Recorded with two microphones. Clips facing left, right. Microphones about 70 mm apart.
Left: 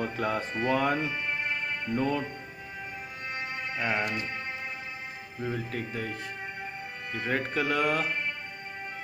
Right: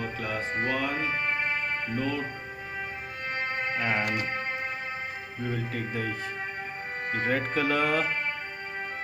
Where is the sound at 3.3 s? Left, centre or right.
Right.